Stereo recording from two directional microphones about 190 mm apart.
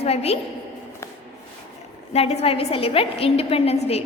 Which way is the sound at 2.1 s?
35° left (ahead or behind).